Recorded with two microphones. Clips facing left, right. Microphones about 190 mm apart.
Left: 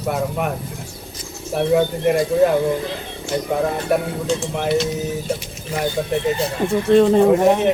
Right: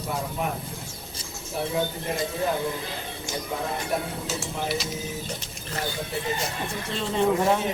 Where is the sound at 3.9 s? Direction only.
70° left (ahead or behind).